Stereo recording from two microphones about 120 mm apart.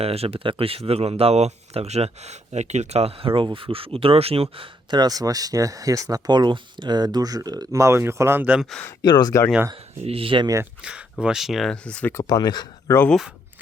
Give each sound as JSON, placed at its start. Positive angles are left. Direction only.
{"t": 0.0, "sound": "speech", "side_deg": -55}
{"t": 9.0, "sound": "speech", "side_deg": 35}
{"t": 10.0, "sound": "speech", "side_deg": -55}
{"t": 10.8, "sound": "speech", "side_deg": -10}
{"t": 12.1, "sound": "speech", "side_deg": 35}